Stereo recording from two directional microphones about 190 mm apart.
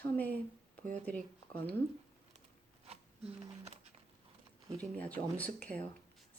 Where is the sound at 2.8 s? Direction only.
30° right (ahead or behind).